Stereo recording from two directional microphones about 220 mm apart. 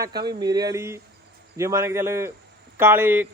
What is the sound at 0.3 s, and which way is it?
Speech, 20° right (ahead or behind).